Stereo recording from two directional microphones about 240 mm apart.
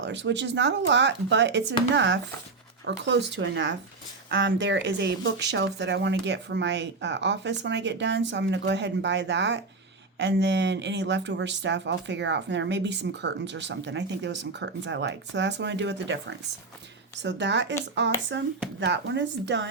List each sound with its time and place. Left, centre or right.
0.0 s speech: right